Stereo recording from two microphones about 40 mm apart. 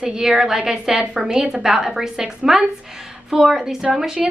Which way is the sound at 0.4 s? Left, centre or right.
Centre.